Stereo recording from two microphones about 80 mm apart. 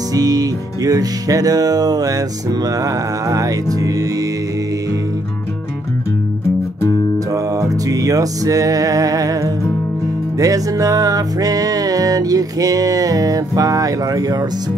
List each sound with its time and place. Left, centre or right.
0.1 s music: right
7.3 s music: right